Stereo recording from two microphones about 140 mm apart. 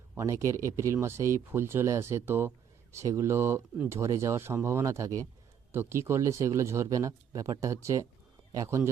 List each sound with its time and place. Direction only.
0.2 s speech: 20° right (ahead or behind)